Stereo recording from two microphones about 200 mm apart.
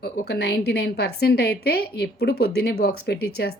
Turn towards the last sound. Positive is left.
turn(degrees=55)  # may be behind; listen again after turning